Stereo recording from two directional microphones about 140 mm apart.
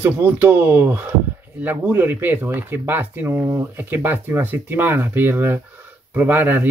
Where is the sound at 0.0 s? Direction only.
15° right (ahead or behind).